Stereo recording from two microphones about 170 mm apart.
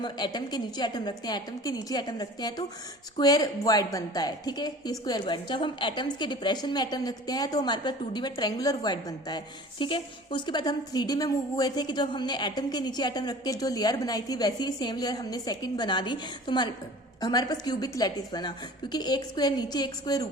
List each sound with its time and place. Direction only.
0.0 s speech: 25° left (ahead or behind)